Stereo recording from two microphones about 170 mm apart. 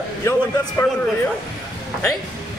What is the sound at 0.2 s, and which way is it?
Speech, 15° left (ahead or behind).